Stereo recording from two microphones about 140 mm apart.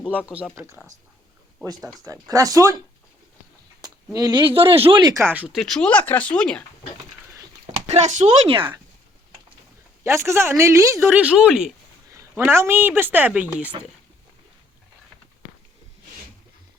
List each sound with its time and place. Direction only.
0.5 s speech: 20° right (ahead or behind)
3.8 s speech: 25° right (ahead or behind)
5.2 s a woman's voice: 10° right (ahead or behind)
5.5 s speech: 5° left (ahead or behind)
7.9 s speech: 55° right (ahead or behind)
8.4 s speech: 35° right (ahead or behind)
10.0 s a woman's voice: 20° right (ahead or behind)
12.5 s a woman's voice: 15° right (ahead or behind)